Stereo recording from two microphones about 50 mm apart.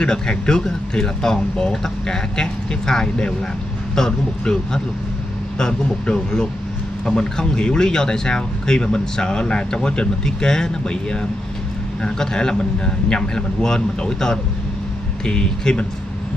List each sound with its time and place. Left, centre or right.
0.0 s speech: centre